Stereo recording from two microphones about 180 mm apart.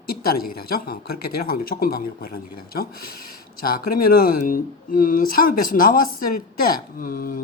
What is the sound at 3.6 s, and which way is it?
Speech, 55° left (ahead or behind).